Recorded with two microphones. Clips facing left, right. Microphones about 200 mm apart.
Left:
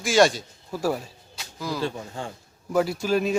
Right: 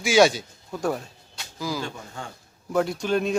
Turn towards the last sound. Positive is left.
turn(degrees=5)  # may be behind; listen again after turning